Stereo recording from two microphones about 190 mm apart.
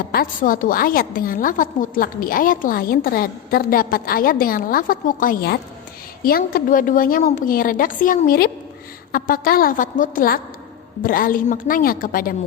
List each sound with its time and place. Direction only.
0.1 s a woman's voice: 50° left (ahead or behind)